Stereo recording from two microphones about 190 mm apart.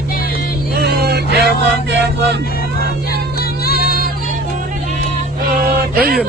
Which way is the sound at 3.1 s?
55° left (ahead or behind).